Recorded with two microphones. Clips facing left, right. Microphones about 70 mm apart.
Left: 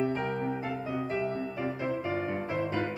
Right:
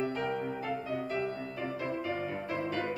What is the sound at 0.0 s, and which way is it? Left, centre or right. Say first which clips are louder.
Music: left 3 dB; left.